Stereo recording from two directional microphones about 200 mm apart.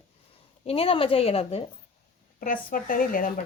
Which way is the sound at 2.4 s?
45° left (ahead or behind).